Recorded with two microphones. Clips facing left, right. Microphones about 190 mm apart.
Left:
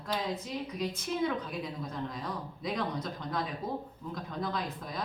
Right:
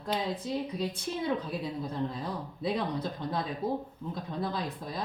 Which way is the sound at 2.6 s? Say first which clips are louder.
Right 3 dB; 30° right (ahead or behind).